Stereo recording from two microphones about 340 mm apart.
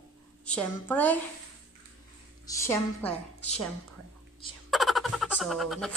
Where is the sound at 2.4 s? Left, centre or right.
Centre.